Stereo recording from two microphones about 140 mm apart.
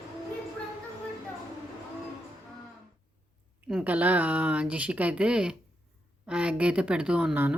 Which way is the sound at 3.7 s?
10° right (ahead or behind).